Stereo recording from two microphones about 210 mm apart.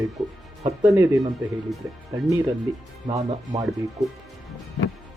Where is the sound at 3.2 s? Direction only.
30° right (ahead or behind).